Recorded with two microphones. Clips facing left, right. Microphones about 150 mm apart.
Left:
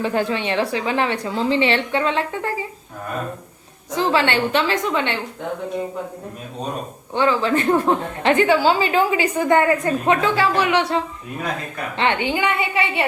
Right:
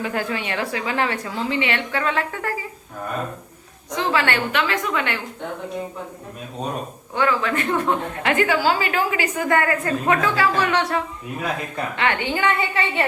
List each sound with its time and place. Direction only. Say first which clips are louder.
0.0 s a woman's voice: left 4 dB; 25° left (ahead or behind)
3.9 s a woman's voice: left 3 dB; 25° left (ahead or behind)
7.1 s a woman's voice: left 3 dB; 25° left (ahead or behind)